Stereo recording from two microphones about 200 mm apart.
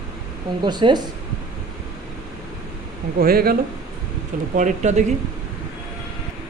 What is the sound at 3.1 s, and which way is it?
Speech, 50° right (ahead or behind).